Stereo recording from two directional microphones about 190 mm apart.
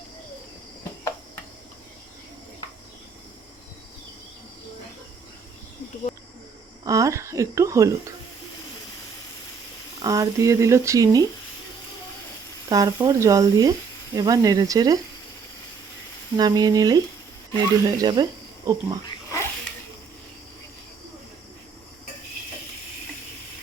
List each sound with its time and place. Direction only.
6.8 s speech: 15° right (ahead or behind)
10.0 s speech: 20° right (ahead or behind)
12.6 s speech: 20° right (ahead or behind)
16.4 s speech: 20° right (ahead or behind)
19.0 s a sound: 15° left (ahead or behind)